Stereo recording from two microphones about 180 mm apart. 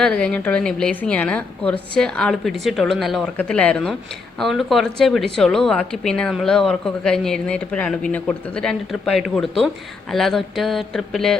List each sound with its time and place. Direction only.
0.0 s a woman's voice: 5° left (ahead or behind)